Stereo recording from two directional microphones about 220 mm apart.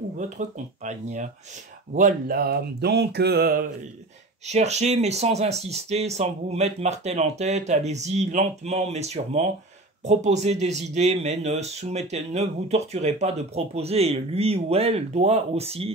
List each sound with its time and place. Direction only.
0.2 s speech: 35° right (ahead or behind)
4.5 s speech: 30° right (ahead or behind)